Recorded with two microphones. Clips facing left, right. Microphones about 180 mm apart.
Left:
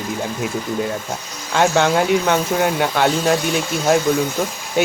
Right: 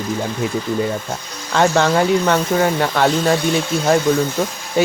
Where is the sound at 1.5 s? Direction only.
5° left (ahead or behind).